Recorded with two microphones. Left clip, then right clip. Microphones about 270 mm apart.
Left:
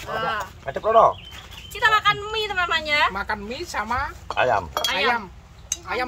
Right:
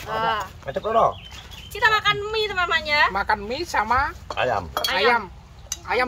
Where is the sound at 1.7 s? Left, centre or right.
Centre.